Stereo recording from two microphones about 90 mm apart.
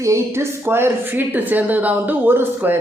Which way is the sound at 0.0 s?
30° right (ahead or behind).